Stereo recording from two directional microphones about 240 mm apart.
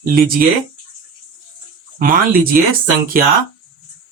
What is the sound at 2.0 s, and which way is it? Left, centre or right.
Speech, right.